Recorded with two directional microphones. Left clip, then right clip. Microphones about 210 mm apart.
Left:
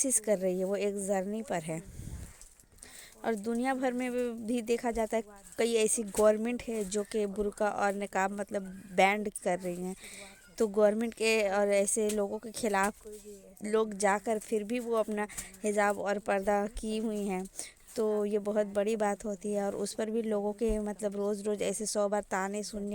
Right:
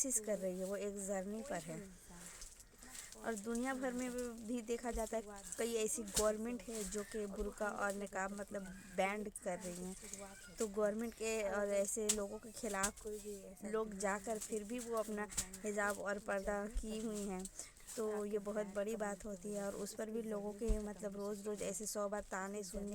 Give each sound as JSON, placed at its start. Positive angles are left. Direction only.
{"t": 0.0, "sound": "speech", "side_deg": 35}
{"t": 3.2, "sound": "speech", "side_deg": 35}